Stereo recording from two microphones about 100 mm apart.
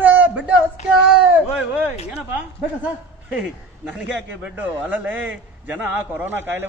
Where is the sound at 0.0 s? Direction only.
15° right (ahead or behind).